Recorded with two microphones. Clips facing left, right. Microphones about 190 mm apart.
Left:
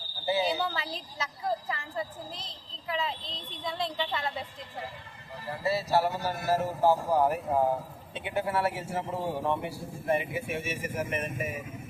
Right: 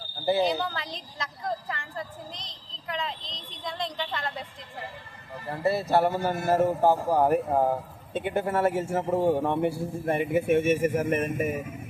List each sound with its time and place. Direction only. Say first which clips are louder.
0.4 s a woman's voice: right 3 dB; 5° left (ahead or behind)
5.5 s a man's voice: right 4 dB; 55° right (ahead or behind)